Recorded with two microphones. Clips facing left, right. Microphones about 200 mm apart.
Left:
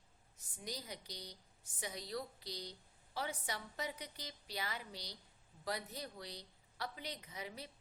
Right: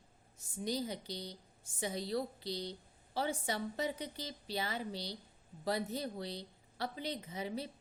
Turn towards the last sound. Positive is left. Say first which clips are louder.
# right 8 dB
turn(degrees=-30)  # may be behind; listen again after turning